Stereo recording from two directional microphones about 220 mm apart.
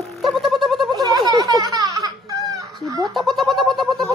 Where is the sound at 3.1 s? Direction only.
Centre (ahead or behind).